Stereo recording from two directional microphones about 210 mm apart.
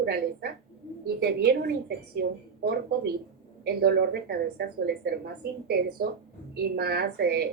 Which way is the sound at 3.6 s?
50° right (ahead or behind).